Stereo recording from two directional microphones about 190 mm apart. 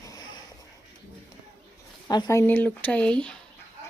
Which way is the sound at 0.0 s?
20° left (ahead or behind).